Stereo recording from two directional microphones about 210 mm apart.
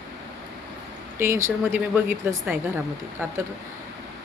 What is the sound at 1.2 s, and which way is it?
Speech, 10° right (ahead or behind).